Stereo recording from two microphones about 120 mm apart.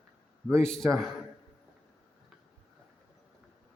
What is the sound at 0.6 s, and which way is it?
Speech, 5° left (ahead or behind).